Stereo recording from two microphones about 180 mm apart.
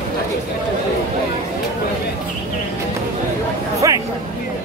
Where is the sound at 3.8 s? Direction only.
20° right (ahead or behind).